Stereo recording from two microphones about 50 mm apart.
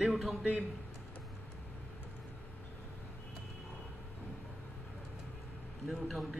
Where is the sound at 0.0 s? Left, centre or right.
Centre.